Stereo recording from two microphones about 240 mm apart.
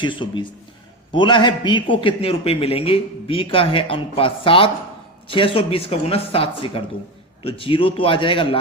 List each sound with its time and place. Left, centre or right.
0.0 s a man's voice: centre